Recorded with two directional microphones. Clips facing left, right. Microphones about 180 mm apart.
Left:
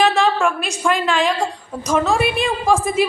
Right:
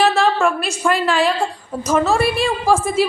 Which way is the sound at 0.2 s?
Centre (ahead or behind).